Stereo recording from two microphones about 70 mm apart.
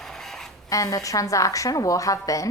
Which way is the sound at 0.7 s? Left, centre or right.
Left.